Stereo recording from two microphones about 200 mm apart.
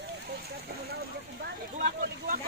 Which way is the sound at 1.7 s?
45° right (ahead or behind).